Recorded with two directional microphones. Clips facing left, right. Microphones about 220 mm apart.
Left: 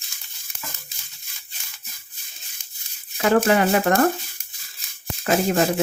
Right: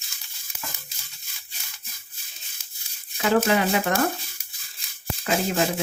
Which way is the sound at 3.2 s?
50° left (ahead or behind).